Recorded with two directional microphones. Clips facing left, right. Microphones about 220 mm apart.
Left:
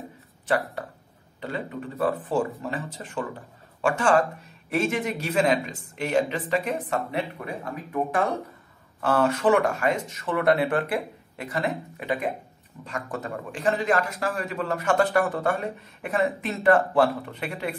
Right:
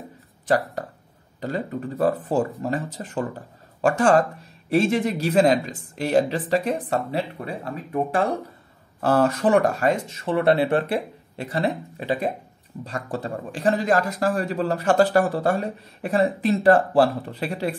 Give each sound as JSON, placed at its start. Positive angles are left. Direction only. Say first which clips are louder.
{"t": 1.4, "sound": "a man's voice", "louder": "right 4 dB", "side_deg": -40}